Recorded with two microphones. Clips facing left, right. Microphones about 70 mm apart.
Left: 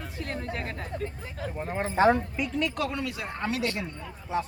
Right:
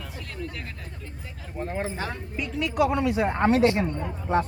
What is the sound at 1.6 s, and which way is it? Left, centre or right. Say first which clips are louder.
Speech: right 2 dB; centre.